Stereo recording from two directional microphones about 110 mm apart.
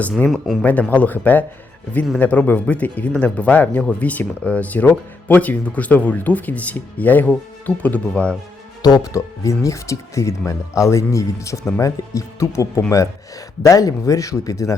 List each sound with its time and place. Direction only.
0.3 s speech: centre (ahead or behind)
0.6 s speech: 15° left (ahead or behind)
8.8 s speech: 35° left (ahead or behind)